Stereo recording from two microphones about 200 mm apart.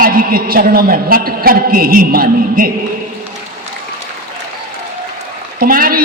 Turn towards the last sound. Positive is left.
turn(degrees=-45)  # may be behind; listen again after turning